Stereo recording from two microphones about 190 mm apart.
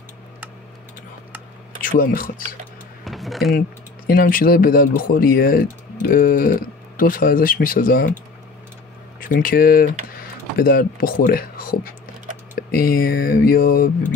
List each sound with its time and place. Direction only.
1.8 s speech: 45° left (ahead or behind)
3.1 s a sound: centre (ahead or behind)
4.1 s speech: 50° left (ahead or behind)
9.2 s speech: 45° left (ahead or behind)